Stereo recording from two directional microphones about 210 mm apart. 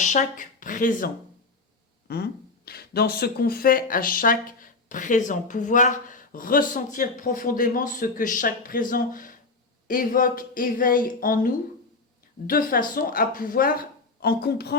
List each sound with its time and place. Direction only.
0.0 s a woman's voice: 35° left (ahead or behind)